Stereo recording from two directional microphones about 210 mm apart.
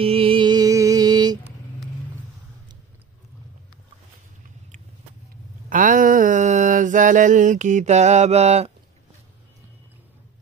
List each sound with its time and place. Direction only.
0.0 s music: 25° right (ahead or behind)
5.7 s mantra: 40° right (ahead or behind)